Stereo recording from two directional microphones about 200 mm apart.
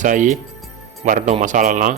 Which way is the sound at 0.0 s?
40° right (ahead or behind).